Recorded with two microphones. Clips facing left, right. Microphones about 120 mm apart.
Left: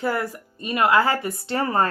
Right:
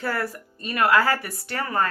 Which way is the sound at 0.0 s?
20° left (ahead or behind).